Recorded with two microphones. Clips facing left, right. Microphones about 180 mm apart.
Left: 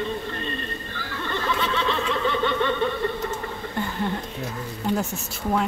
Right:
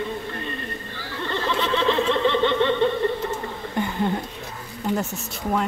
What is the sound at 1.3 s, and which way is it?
Laughter, 25° right (ahead or behind).